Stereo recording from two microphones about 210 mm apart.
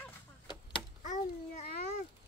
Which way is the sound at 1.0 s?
35° left (ahead or behind).